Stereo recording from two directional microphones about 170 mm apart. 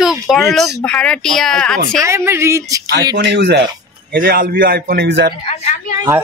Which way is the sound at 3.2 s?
75° right (ahead or behind).